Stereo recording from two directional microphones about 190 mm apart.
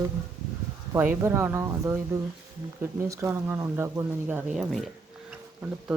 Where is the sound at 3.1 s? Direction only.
15° right (ahead or behind).